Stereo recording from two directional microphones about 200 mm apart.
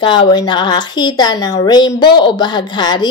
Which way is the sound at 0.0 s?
25° left (ahead or behind).